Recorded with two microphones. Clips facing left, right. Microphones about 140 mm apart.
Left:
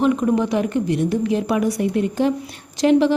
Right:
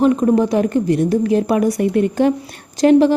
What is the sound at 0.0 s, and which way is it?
A woman's voice, 35° right (ahead or behind).